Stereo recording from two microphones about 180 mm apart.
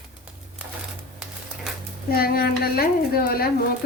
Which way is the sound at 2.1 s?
60° left (ahead or behind).